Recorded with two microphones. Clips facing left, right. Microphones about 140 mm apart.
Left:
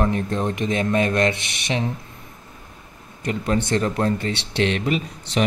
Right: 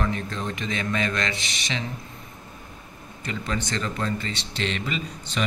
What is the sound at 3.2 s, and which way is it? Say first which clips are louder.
Speech: left 7 dB; 55° left (ahead or behind).